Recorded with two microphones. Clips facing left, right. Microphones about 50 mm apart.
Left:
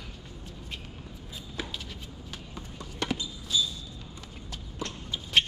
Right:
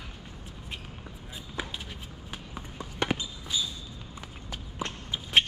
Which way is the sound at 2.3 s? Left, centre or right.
Right.